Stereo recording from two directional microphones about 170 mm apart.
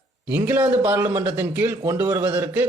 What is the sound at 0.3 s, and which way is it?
A man's voice, 10° right (ahead or behind).